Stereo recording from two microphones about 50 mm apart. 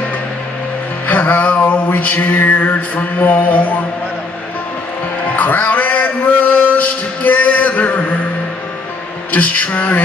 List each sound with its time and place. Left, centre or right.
1.0 s music: left
5.3 s a man's voice: left
6.6 s music: left
9.3 s music: left